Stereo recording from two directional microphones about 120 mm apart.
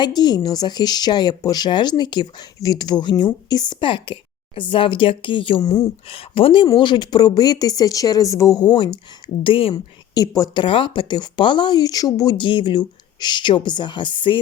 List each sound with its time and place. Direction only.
0.0 s speech: 35° left (ahead or behind)
9.7 s speech: 30° left (ahead or behind)